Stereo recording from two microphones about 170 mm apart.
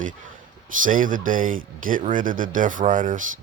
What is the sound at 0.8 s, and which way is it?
Speech, 50° right (ahead or behind).